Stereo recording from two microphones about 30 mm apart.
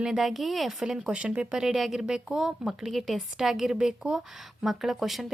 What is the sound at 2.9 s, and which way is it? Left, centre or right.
Speech, centre.